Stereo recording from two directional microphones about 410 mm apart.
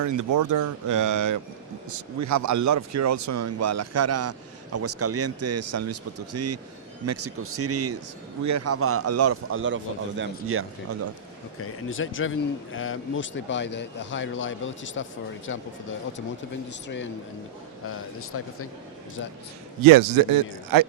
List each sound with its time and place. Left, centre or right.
0.0 s speech: right
11.6 s a man's voice: left
17.8 s speech: left
19.8 s speech: right